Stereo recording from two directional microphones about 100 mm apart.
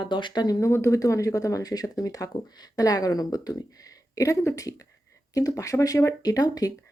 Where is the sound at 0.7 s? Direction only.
30° left (ahead or behind).